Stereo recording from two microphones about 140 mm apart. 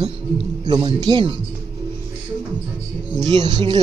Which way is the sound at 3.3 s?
30° right (ahead or behind).